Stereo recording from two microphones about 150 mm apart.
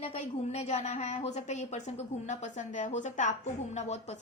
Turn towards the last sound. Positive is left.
turn(degrees=50)  # may be behind; listen again after turning